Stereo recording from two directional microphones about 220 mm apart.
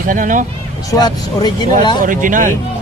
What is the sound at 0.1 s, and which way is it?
Speech, 35° right (ahead or behind).